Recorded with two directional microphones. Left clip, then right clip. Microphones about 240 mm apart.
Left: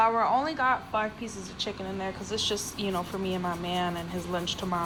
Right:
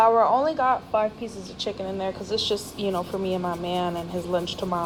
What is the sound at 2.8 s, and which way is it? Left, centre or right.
A woman's voice, right.